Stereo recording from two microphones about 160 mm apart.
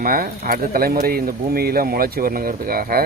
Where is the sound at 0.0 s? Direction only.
65° right (ahead or behind).